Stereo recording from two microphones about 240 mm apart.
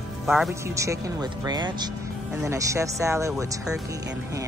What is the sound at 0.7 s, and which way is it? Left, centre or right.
Speech, centre.